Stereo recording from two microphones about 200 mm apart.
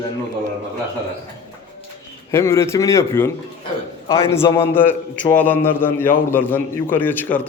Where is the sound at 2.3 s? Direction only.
15° left (ahead or behind).